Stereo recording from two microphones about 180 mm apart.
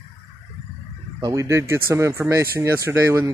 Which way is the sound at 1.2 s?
15° right (ahead or behind).